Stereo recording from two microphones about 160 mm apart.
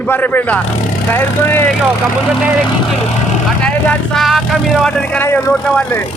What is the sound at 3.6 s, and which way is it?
Speech, 5° left (ahead or behind).